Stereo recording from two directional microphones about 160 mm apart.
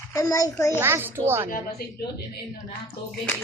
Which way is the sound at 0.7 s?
15° right (ahead or behind).